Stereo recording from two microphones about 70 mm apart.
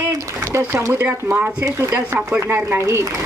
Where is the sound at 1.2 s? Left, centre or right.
Right.